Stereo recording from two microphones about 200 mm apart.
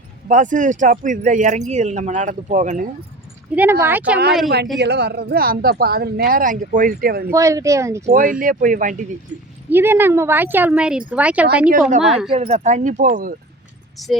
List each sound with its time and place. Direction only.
0.3 s speech: 40° right (ahead or behind)
3.5 s speech: 10° right (ahead or behind)
4.8 s speech: 55° right (ahead or behind)
7.3 s speech: 15° right (ahead or behind)
8.0 s speech: 40° right (ahead or behind)
9.6 s a woman's voice: 10° right (ahead or behind)
12.3 s speech: 30° right (ahead or behind)